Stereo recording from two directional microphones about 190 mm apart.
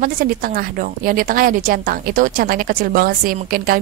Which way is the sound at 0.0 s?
50° right (ahead or behind).